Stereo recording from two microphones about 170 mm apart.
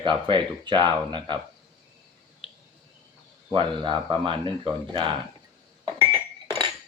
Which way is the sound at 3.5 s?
30° right (ahead or behind).